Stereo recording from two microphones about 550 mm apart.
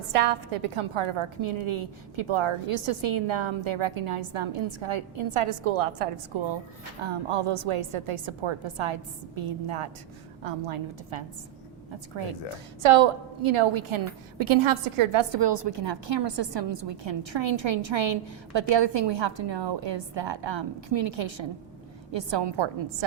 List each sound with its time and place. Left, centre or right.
0.1 s a woman's voice: right
12.8 s a woman's voice: right